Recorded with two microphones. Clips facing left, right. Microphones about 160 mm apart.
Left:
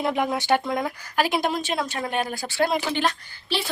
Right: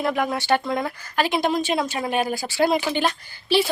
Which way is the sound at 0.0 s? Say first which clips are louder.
Right 1 dB; 20° left (ahead or behind).